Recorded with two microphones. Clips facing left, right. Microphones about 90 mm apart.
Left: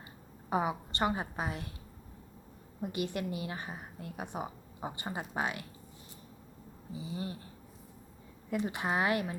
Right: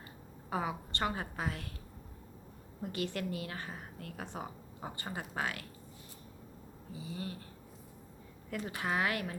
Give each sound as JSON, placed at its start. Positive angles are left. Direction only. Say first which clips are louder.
{"t": 0.5, "sound": "a woman's voice", "louder": "left 4 dB", "side_deg": 20}
{"t": 2.8, "sound": "a woman's voice", "louder": "left 2 dB", "side_deg": 15}
{"t": 6.9, "sound": "a woman's voice", "louder": "left 3 dB", "side_deg": 20}
{"t": 8.4, "sound": "a woman's voice", "louder": "left 4 dB", "side_deg": 20}